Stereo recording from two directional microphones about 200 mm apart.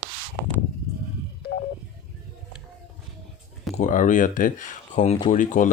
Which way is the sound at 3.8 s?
40° left (ahead or behind).